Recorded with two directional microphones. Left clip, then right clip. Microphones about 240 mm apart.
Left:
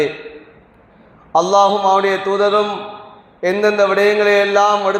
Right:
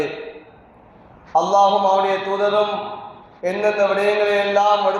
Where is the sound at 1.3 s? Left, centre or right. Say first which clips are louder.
Left 2 dB; left.